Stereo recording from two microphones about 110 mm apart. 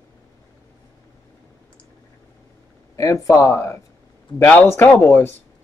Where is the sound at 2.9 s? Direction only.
30° left (ahead or behind).